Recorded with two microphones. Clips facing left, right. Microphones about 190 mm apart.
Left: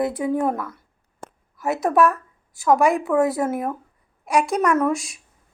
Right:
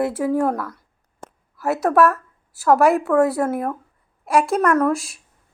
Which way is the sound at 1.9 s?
5° right (ahead or behind).